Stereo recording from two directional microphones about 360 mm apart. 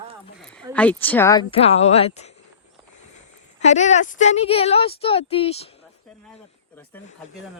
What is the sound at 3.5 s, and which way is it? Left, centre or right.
Speech, centre.